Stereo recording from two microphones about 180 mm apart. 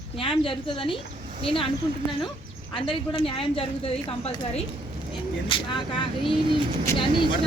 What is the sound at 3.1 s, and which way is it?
A woman's voice, 30° left (ahead or behind).